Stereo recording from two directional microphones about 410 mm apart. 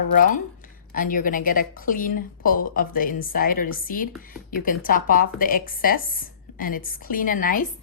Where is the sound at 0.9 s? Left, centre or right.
Centre.